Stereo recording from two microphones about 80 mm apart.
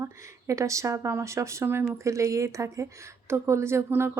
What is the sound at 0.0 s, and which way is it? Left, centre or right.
Speech, right.